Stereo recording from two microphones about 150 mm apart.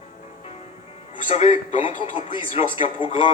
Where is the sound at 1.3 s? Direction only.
45° left (ahead or behind).